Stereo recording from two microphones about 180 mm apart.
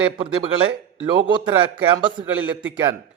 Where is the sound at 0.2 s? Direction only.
30° right (ahead or behind).